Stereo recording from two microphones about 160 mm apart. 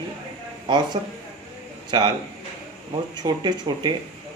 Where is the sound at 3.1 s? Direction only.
25° right (ahead or behind).